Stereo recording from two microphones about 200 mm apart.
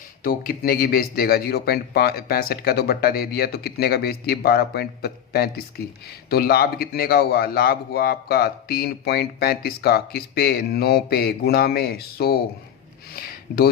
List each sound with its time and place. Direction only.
0.2 s a man's voice: 45° left (ahead or behind)